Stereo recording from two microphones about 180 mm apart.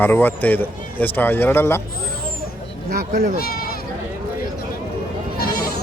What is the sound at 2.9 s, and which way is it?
Speech, 55° right (ahead or behind).